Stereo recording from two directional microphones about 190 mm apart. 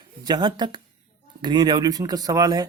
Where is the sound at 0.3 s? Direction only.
20° right (ahead or behind).